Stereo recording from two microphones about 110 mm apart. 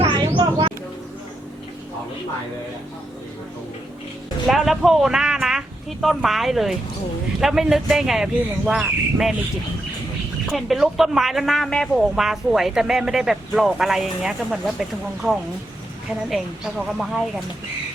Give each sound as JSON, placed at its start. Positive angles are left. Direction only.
{"t": 0.0, "sound": "a sound", "side_deg": -45}
{"t": 4.4, "sound": "speech", "side_deg": 0}
{"t": 10.4, "sound": "speech", "side_deg": 0}